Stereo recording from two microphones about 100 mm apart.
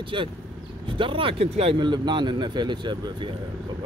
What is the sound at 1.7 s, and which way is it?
A man's voice, 45° right (ahead or behind).